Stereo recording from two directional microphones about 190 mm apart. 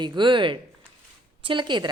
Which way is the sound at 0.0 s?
25° right (ahead or behind).